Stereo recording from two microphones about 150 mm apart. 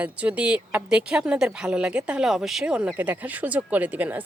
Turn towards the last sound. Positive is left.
turn(degrees=-10)  # may be behind; listen again after turning